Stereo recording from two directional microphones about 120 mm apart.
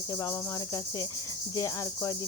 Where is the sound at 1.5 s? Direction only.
30° left (ahead or behind).